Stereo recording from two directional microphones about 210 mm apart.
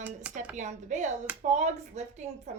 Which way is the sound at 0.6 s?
35° right (ahead or behind).